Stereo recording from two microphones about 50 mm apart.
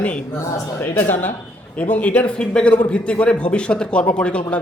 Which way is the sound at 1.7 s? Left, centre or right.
Left.